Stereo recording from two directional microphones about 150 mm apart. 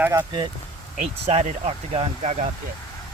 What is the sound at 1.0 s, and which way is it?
Speech, 50° right (ahead or behind).